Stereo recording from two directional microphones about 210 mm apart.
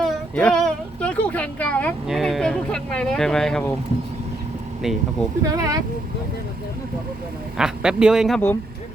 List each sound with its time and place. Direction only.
0.0 s a sound: 5° left (ahead or behind)
5.4 s speech: 15° right (ahead or behind)
7.5 s speech: 5° right (ahead or behind)